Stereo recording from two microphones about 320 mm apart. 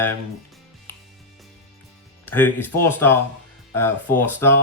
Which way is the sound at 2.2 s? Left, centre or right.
Centre.